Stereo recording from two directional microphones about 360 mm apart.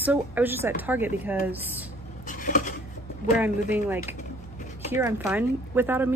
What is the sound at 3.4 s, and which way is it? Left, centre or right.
A woman's voice, centre.